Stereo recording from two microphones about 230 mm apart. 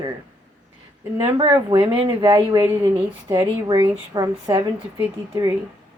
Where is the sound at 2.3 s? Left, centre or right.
Centre.